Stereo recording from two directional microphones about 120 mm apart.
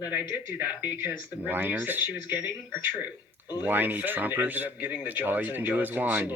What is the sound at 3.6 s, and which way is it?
Speech, 15° right (ahead or behind).